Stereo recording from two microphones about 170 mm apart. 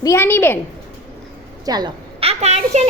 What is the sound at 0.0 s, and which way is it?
Speech, 15° left (ahead or behind).